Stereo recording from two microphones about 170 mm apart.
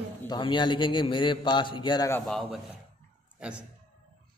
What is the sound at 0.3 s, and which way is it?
A man's voice, 30° left (ahead or behind).